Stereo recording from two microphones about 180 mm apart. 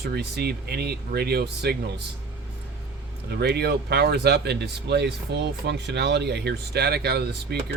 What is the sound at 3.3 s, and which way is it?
Speech, 65° right (ahead or behind).